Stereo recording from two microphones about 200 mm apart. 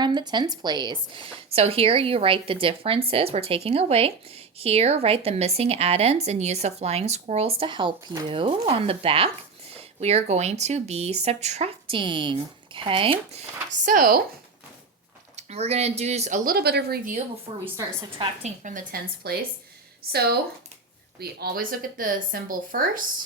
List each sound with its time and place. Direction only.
0.0 s a woman's voice: 20° right (ahead or behind)
13.8 s speech: 40° right (ahead or behind)
15.4 s speech: 35° right (ahead or behind); by 17.2 s 50° right (ahead or behind)
18.4 s speech: 40° right (ahead or behind)